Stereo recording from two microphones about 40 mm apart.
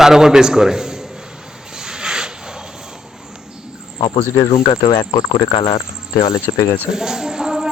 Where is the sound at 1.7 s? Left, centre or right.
Centre.